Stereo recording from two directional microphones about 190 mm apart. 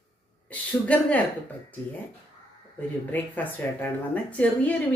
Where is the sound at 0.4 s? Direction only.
10° left (ahead or behind).